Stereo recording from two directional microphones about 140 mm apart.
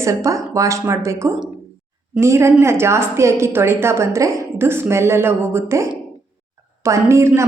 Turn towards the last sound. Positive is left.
turn(degrees=-20)  # may be behind; listen again after turning